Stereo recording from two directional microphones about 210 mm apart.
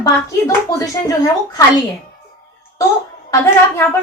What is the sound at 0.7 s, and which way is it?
Speech, 15° left (ahead or behind).